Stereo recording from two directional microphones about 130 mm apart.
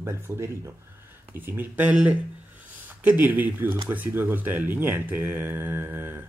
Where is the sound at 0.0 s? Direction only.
20° right (ahead or behind).